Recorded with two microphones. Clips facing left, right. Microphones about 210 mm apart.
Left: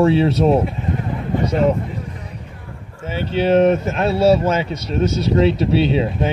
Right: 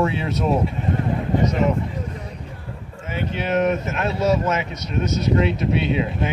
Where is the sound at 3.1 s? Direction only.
30° left (ahead or behind).